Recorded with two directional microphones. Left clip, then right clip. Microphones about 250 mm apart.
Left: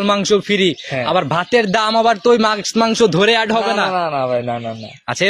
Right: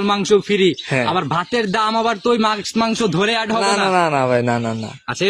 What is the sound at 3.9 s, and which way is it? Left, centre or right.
Speech, right.